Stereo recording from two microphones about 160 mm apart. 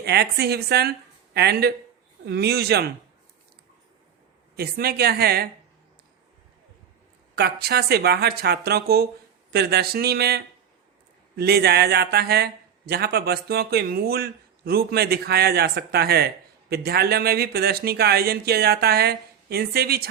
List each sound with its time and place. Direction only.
0.0 s a woman's voice: 90° right
4.5 s speech: 75° right (ahead or behind)
7.3 s speech: 80° right